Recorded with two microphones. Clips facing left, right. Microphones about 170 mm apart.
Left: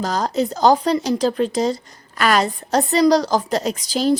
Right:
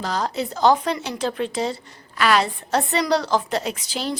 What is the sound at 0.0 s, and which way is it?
Speech, 40° left (ahead or behind).